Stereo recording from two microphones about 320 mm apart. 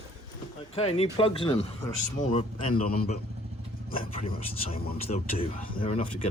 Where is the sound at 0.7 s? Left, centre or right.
Centre.